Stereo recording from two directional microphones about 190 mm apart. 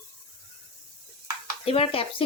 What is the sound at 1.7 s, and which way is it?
Speech, 30° left (ahead or behind).